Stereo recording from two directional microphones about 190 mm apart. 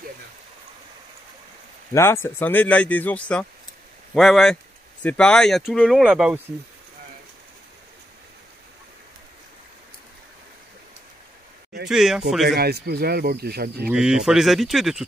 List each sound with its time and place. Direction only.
2.0 s speech: 15° left (ahead or behind); by 6.4 s 5° right (ahead or behind)
11.9 s speech: 5° right (ahead or behind)
12.5 s speech: 55° right (ahead or behind)
13.8 s speech: 5° right (ahead or behind)